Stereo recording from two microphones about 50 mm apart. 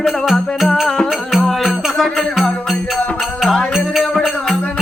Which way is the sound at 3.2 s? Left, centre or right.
Centre.